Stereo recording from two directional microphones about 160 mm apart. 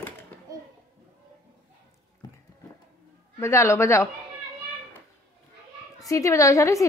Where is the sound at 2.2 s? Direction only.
25° left (ahead or behind).